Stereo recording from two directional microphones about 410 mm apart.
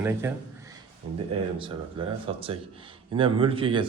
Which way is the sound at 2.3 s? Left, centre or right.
Centre.